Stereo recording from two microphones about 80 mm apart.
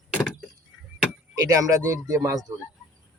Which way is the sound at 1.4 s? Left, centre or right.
Right.